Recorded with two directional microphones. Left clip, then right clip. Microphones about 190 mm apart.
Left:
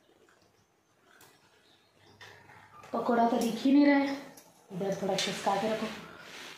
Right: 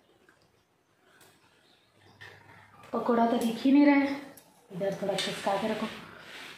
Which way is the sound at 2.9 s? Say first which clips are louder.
Right 1 dB; 20° right (ahead or behind).